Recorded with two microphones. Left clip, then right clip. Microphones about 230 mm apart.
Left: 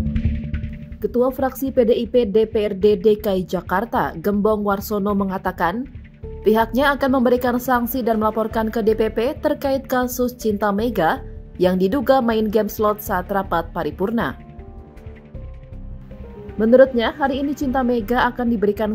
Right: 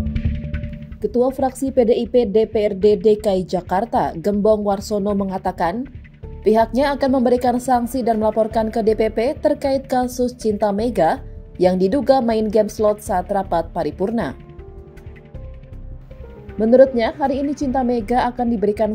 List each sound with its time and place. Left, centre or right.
1.0 s a woman's voice: centre
5.0 s speech: left
5.3 s a woman's voice: centre
16.5 s a woman's voice: centre